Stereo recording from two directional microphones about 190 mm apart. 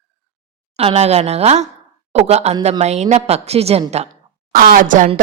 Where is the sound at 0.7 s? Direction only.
30° right (ahead or behind).